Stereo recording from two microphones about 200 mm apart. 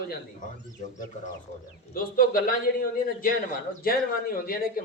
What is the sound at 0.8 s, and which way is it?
A man's voice, 40° left (ahead or behind).